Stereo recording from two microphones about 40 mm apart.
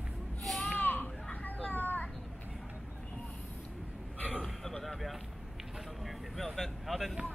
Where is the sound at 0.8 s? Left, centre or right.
Left.